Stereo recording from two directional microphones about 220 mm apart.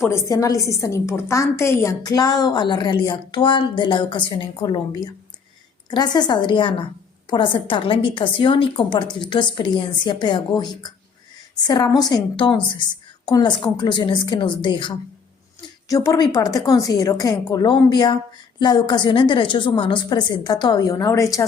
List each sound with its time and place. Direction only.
0.0 s a woman's voice: 15° left (ahead or behind)